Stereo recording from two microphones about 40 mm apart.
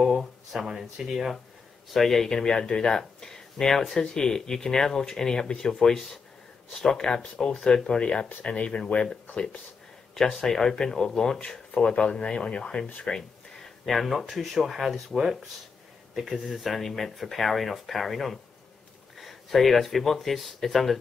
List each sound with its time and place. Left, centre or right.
0.0 s a sound: centre
0.7 s speech: centre
2.0 s speech: centre; by 9.0 s left
9.0 s speech: centre
13.8 s speech: centre
16.5 s speech: centre